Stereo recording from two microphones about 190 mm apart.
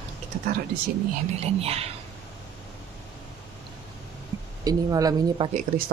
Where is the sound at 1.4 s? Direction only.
30° right (ahead or behind).